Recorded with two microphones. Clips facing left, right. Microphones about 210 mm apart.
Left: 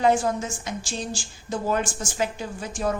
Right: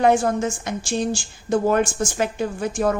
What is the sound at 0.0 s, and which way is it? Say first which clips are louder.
A woman's voice: right 4 dB; 60° right (ahead or behind).